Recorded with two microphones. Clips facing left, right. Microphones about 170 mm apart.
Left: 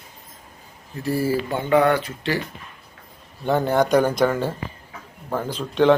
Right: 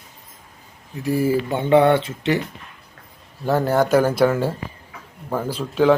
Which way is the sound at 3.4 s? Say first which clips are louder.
Right 1 dB; centre (ahead or behind).